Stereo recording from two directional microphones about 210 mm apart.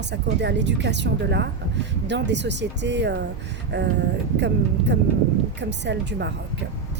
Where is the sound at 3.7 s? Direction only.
55° right (ahead or behind).